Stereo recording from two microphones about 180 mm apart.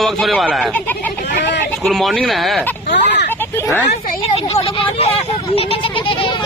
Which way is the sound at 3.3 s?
10° left (ahead or behind).